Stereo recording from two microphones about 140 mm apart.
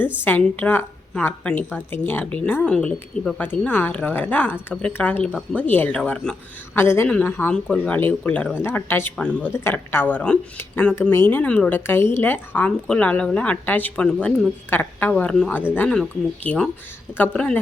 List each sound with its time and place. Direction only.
0.0 s a woman's voice: 15° left (ahead or behind)
6.7 s a woman's voice: 15° left (ahead or behind)